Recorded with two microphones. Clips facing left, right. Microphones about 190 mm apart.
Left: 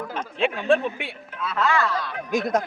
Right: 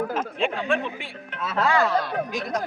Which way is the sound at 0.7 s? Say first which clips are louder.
Left 7 dB; 30° left (ahead or behind).